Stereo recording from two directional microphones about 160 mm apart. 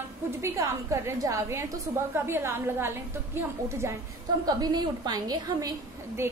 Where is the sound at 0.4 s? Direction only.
20° right (ahead or behind).